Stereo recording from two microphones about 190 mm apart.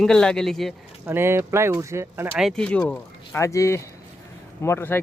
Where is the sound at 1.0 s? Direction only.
10° right (ahead or behind).